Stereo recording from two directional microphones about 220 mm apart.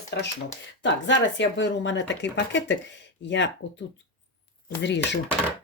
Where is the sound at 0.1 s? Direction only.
50° left (ahead or behind).